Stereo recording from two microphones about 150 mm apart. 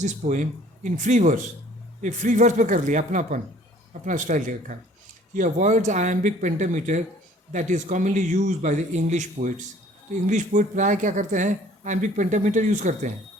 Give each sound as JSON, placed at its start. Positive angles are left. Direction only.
{"t": 0.0, "sound": "a man's voice", "side_deg": -55}